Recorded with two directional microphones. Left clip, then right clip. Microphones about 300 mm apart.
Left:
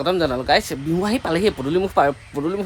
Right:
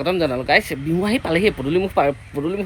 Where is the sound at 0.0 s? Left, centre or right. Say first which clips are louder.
Even; centre.